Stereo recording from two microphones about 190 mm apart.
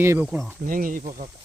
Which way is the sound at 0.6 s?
45° right (ahead or behind).